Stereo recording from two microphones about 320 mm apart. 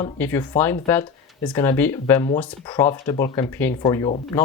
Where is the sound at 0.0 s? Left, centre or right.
Centre.